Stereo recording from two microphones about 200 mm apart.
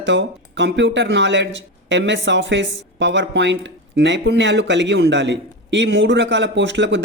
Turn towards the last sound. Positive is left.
turn(degrees=-65)  # may be behind; listen again after turning